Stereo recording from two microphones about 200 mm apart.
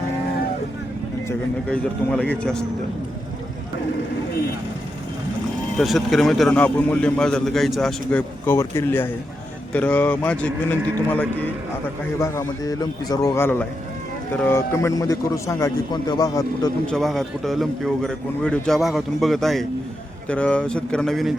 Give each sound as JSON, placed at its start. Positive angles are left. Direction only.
{"t": 1.7, "sound": "a man's voice", "side_deg": 5}
{"t": 5.7, "sound": "a man's voice", "side_deg": 0}
{"t": 16.8, "sound": "a man's voice", "side_deg": 0}